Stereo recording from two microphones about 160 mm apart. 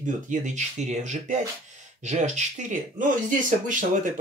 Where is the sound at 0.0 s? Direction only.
50° right (ahead or behind).